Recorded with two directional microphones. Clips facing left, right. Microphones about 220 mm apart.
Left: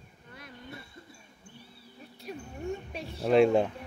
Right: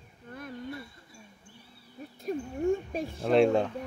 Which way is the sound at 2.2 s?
50° right (ahead or behind).